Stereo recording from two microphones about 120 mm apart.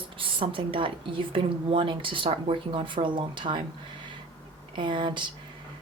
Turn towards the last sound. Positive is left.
turn(degrees=-40)  # may be behind; listen again after turning